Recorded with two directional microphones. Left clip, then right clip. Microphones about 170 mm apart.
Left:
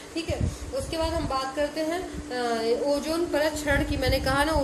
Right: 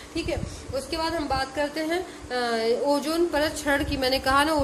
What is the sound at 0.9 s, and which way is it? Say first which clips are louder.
A woman's voice: right 2 dB; 40° right (ahead or behind).